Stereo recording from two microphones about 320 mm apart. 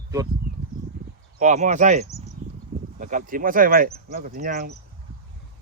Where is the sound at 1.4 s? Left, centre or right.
Right.